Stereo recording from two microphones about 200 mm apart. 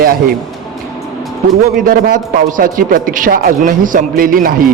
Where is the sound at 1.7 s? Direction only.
45° right (ahead or behind).